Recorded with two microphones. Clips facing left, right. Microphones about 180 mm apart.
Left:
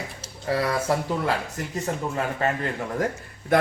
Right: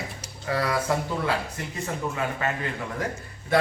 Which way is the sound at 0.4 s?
25° left (ahead or behind).